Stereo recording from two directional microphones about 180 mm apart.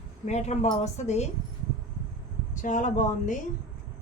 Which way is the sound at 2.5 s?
45° left (ahead or behind).